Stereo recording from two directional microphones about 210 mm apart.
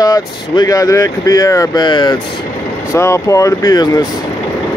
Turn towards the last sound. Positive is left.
turn(degrees=15)  # may be behind; listen again after turning